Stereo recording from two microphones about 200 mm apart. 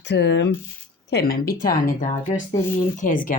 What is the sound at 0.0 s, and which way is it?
Speech, 60° left (ahead or behind).